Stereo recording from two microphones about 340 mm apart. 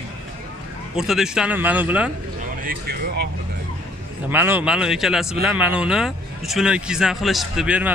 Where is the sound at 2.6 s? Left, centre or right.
Right.